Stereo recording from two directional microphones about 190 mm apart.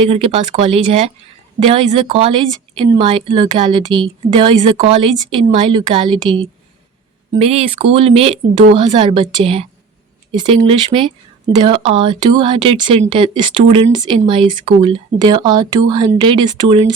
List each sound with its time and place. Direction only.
0.0 s speech: 30° right (ahead or behind)